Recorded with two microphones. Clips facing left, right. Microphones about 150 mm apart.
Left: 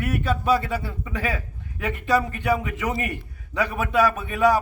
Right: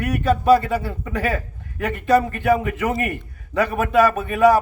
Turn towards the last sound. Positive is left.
turn(degrees=-50)  # may be behind; listen again after turning